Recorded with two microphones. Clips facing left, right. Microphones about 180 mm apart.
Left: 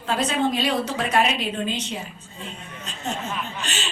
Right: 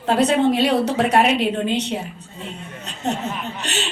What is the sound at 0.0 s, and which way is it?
A woman's voice, 65° right (ahead or behind).